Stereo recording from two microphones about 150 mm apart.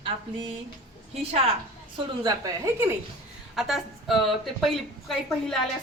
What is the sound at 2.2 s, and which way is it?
Speech, 25° right (ahead or behind).